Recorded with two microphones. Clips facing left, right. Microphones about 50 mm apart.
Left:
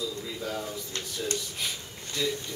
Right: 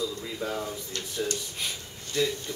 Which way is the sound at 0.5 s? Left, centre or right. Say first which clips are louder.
Right 1 dB; centre.